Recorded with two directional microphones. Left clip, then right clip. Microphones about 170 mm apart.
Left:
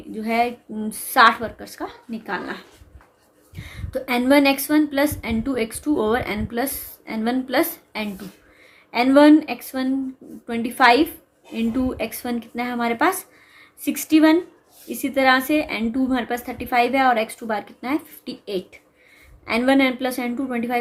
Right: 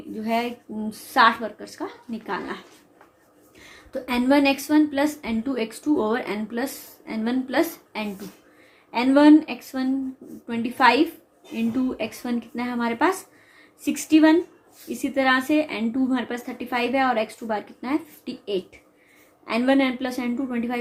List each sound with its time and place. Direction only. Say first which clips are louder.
0.2 s a woman's voice: left 4 dB; 40° left (ahead or behind)